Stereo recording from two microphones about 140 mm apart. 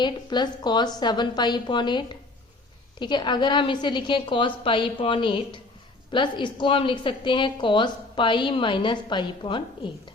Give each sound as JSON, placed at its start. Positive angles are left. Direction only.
{"t": 0.0, "sound": "a woman's voice", "side_deg": 30}